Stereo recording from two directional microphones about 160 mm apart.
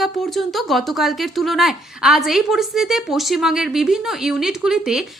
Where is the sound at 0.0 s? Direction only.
Centre (ahead or behind).